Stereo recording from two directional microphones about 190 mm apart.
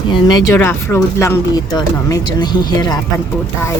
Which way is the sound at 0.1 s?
20° left (ahead or behind).